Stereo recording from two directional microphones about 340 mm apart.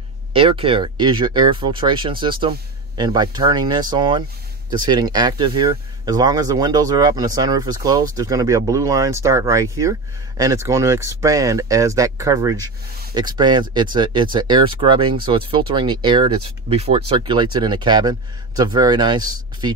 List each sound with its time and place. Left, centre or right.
0.3 s speech: centre